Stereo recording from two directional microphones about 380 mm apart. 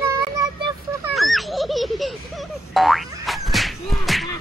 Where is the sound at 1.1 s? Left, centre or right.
Centre.